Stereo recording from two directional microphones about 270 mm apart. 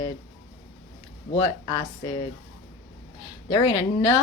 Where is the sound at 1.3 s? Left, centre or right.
Centre.